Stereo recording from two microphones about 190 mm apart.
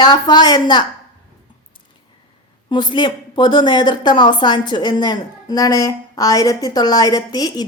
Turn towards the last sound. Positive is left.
turn(degrees=20)  # may be behind; listen again after turning